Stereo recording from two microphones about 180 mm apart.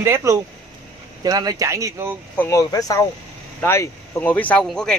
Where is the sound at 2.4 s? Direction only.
15° left (ahead or behind).